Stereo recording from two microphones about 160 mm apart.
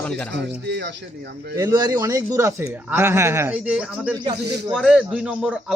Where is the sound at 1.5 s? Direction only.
25° right (ahead or behind); by 5.7 s 5° right (ahead or behind).